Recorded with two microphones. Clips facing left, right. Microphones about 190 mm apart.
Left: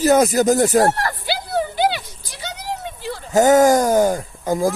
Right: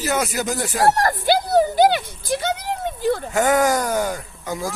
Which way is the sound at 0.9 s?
45° right (ahead or behind).